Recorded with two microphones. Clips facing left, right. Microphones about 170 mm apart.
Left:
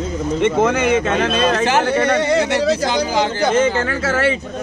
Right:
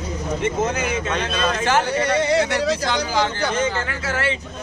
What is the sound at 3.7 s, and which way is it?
Speech, 45° left (ahead or behind).